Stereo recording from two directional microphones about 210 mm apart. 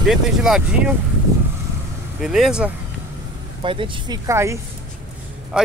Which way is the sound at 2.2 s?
Centre (ahead or behind).